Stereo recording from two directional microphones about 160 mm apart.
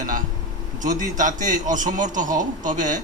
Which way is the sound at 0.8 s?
55° right (ahead or behind).